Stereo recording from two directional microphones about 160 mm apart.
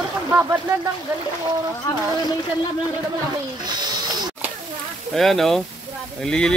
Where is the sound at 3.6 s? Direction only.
25° right (ahead or behind).